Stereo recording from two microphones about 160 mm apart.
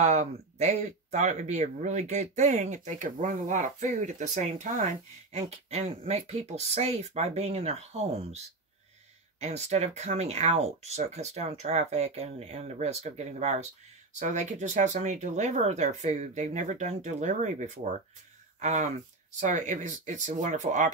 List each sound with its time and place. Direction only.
0.0 s speech: 45° right (ahead or behind)
9.4 s speech: 45° right (ahead or behind)